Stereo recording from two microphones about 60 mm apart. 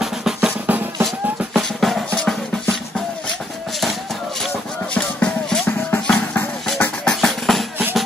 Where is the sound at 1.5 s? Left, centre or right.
Centre.